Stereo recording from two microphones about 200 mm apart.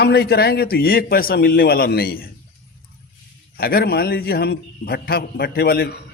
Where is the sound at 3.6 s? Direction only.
50° left (ahead or behind).